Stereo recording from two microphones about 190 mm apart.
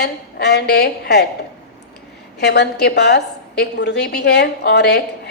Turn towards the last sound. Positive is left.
turn(degrees=60)  # may be behind; listen again after turning